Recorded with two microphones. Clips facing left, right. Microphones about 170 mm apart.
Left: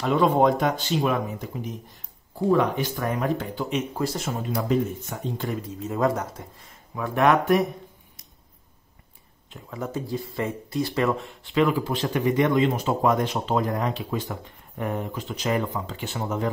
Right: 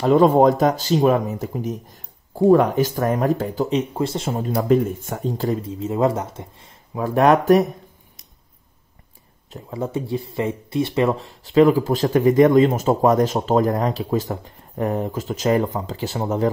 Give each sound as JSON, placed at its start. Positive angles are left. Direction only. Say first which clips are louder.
{"t": 0.0, "sound": "speech", "louder": "right 6 dB", "side_deg": -40}
{"t": 4.6, "sound": "speech", "louder": "right 7 dB", "side_deg": -50}
{"t": 9.5, "sound": "speech", "louder": "right 6 dB", "side_deg": -30}